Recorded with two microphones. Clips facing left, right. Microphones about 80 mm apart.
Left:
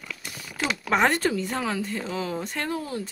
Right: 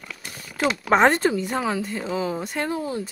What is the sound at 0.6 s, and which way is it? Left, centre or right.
Speech, right.